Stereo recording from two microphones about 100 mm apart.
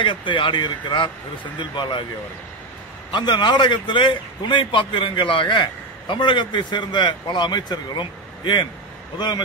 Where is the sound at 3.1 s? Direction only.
50° left (ahead or behind).